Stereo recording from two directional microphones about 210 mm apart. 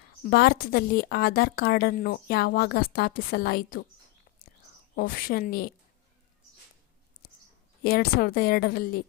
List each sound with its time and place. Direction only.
0.2 s a woman's voice: 45° left (ahead or behind)
4.9 s a woman's voice: 40° left (ahead or behind)
7.2 s a sound: 45° left (ahead or behind)
7.9 s a woman's voice: 45° left (ahead or behind)